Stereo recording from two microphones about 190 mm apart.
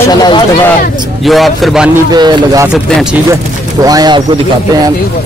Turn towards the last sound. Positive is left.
turn(degrees=-20)  # may be behind; listen again after turning